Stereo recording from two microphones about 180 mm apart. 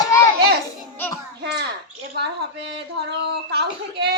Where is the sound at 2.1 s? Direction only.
70° right (ahead or behind).